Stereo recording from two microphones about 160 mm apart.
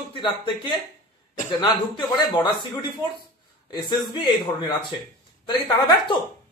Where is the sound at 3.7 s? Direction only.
25° left (ahead or behind).